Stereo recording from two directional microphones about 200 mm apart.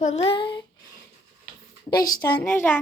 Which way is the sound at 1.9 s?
20° left (ahead or behind).